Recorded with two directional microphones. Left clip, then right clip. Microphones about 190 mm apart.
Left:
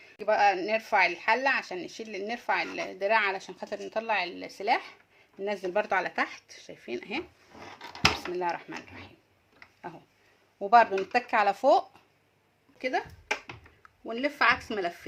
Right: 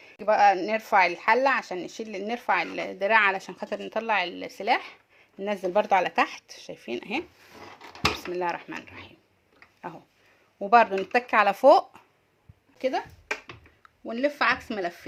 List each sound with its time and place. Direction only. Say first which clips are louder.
0.0 s speech: right 4 dB; 30° right (ahead or behind)
7.8 s dishes: left 1 dB; centre (ahead or behind)
8.3 s speech: right 2 dB; 30° right (ahead or behind)
10.6 s speech: right 1 dB; 25° right (ahead or behind)
14.0 s speech: right 1 dB; 30° right (ahead or behind)